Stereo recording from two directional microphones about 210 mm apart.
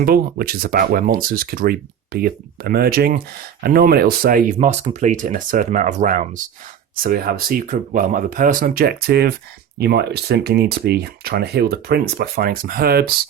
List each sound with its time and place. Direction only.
0.0 s speech: 45° right (ahead or behind)